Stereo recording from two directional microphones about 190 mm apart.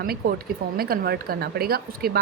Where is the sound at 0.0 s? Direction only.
50° right (ahead or behind).